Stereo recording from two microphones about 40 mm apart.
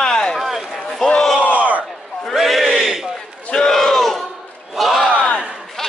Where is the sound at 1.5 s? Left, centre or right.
Right.